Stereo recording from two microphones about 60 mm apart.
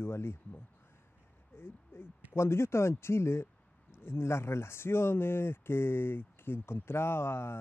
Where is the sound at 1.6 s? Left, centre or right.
Left.